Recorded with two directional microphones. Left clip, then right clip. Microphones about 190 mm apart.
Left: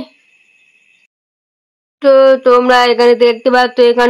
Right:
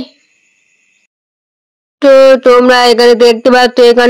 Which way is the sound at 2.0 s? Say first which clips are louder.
Right 3 dB; 30° right (ahead or behind).